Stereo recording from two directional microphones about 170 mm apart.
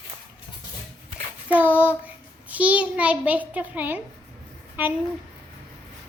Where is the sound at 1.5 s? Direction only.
10° right (ahead or behind).